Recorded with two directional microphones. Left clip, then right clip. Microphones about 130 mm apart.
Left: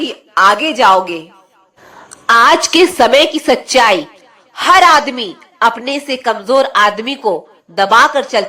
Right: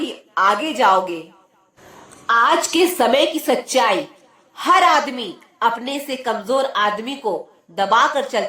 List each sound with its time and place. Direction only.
0.0 s a woman's voice: 20° left (ahead or behind)
2.2 s a woman's voice: 45° left (ahead or behind)
2.6 s a woman's voice: 30° left (ahead or behind)